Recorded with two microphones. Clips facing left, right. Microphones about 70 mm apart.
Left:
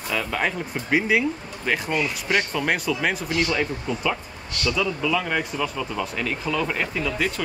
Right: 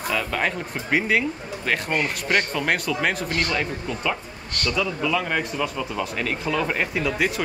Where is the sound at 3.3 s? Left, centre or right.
Right.